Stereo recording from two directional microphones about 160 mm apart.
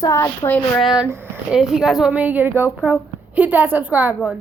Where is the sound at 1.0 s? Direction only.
15° right (ahead or behind).